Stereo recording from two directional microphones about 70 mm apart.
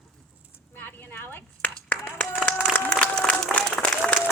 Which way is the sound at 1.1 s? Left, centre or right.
Left.